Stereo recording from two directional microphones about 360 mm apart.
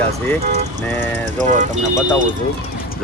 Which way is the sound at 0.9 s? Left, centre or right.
Centre.